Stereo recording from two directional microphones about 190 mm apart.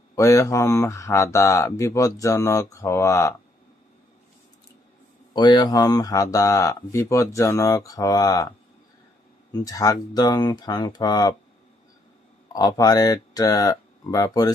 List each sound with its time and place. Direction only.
0.2 s speech: 15° left (ahead or behind)
5.3 s speech: 25° left (ahead or behind)
12.5 s speech: 20° left (ahead or behind)